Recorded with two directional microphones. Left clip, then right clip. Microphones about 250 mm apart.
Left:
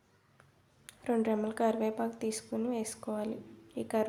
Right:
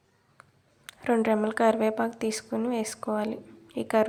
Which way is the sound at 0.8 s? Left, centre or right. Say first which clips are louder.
Right 7 dB; centre.